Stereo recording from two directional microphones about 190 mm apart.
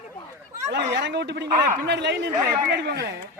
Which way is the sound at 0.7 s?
65° right (ahead or behind).